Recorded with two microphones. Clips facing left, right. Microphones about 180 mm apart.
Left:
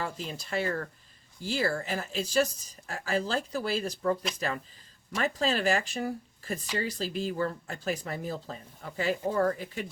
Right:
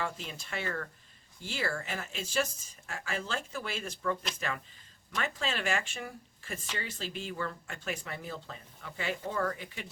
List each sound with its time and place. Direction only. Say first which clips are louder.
0.0 s speech: left 2 dB; 35° left (ahead or behind)